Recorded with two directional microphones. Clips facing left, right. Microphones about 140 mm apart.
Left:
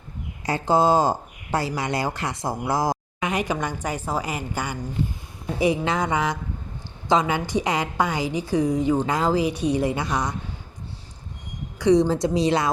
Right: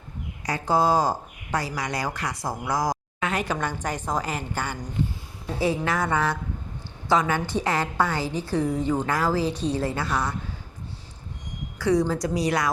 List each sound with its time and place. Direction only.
0.4 s speech: 25° left (ahead or behind)
3.2 s a woman's voice: 15° left (ahead or behind)
11.8 s speech: 20° left (ahead or behind)